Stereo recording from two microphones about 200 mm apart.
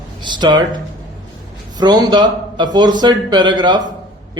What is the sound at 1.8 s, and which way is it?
A man's voice, 20° right (ahead or behind).